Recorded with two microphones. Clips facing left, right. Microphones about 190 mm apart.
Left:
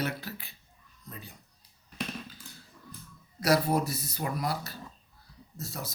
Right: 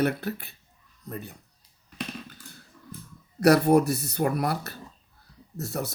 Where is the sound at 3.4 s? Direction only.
65° right (ahead or behind).